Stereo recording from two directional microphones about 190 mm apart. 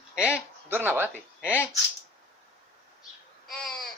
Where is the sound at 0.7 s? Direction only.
10° right (ahead or behind).